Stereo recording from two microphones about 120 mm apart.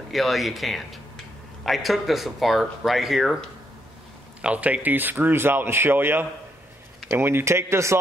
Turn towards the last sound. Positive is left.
turn(degrees=-25)  # may be behind; listen again after turning